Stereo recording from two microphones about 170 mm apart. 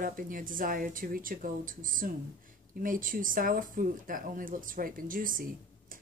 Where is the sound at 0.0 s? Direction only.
55° right (ahead or behind).